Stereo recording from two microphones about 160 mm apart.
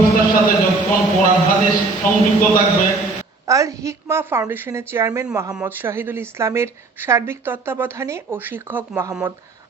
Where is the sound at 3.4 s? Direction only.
20° right (ahead or behind).